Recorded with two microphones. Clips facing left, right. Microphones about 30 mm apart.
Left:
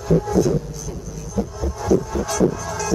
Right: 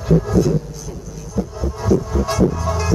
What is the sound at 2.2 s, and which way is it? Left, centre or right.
Music, right.